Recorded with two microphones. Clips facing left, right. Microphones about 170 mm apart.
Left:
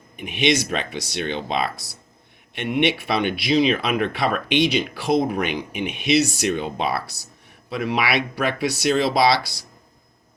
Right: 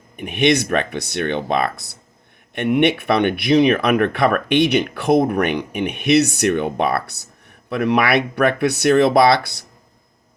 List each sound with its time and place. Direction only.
0.2 s speech: 60° right (ahead or behind)